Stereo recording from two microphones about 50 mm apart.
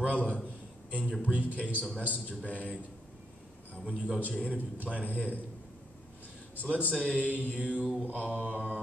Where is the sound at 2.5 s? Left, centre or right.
Left.